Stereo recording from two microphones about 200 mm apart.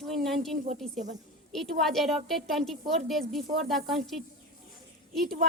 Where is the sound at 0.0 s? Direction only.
Centre (ahead or behind).